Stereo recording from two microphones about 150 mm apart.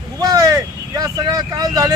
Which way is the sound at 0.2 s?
25° right (ahead or behind).